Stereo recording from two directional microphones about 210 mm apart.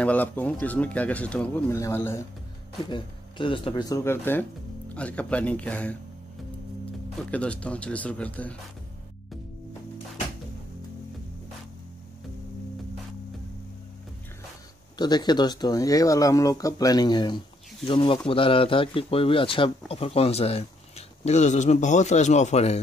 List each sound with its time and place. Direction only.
0.0 s speech: 10° left (ahead or behind)
2.9 s speech: 25° left (ahead or behind); by 5.9 s 5° left (ahead or behind)
7.2 s speech: 5° left (ahead or behind)
15.0 s a man's voice: 20° left (ahead or behind)